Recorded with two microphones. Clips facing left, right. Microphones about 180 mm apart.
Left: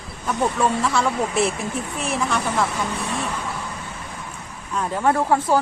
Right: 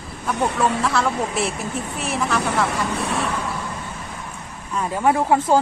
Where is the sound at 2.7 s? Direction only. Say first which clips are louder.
Right 2 dB; 70° right (ahead or behind).